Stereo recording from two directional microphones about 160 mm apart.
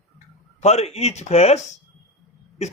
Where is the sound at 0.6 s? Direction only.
45° left (ahead or behind).